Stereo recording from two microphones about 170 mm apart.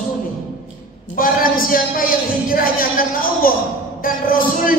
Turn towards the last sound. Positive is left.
turn(degrees=55)  # may be behind; listen again after turning